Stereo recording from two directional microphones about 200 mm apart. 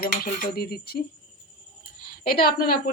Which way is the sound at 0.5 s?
50° left (ahead or behind).